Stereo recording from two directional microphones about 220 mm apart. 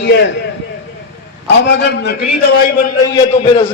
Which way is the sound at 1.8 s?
50° left (ahead or behind).